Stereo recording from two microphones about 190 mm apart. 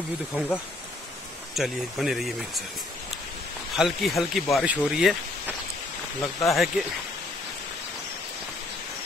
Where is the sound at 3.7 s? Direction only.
Centre (ahead or behind).